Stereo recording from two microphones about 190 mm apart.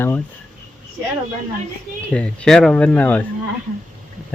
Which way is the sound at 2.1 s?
5° left (ahead or behind).